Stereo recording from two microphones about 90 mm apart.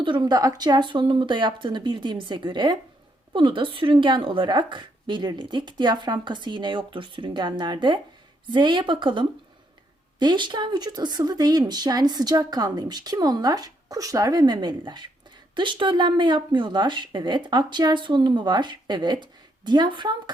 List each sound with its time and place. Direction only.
0.0 s speech: 60° right (ahead or behind)